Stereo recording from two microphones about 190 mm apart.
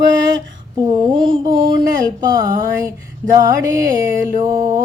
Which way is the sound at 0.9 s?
25° right (ahead or behind).